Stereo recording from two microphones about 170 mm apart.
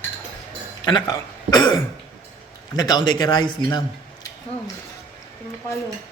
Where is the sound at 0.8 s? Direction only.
25° left (ahead or behind).